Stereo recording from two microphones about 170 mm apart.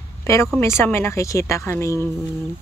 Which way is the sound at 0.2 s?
15° left (ahead or behind).